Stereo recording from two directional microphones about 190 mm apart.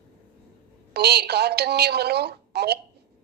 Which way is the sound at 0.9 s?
60° right (ahead or behind).